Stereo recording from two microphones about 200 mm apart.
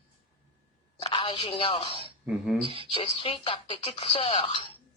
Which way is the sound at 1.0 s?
25° left (ahead or behind).